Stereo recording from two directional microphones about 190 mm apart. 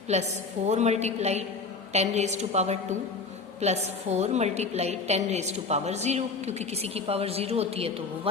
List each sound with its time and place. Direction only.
0.1 s a woman's voice: 35° right (ahead or behind)